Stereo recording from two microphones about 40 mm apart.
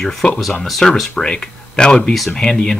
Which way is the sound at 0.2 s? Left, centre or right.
Centre.